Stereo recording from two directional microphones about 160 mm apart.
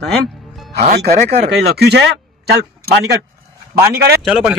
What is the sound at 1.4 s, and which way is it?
Speech, 90° right.